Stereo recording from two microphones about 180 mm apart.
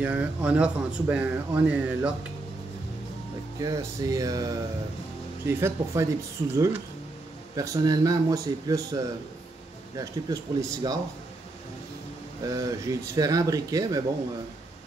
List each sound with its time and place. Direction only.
0.0 s speech: 5° right (ahead or behind)
3.6 s speech: 20° right (ahead or behind)
12.4 s speech: 20° right (ahead or behind)